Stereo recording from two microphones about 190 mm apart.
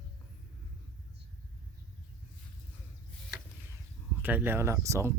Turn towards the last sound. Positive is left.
turn(degrees=-15)  # may be behind; listen again after turning